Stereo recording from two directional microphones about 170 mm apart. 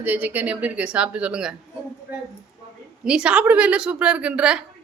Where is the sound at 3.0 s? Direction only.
5° right (ahead or behind).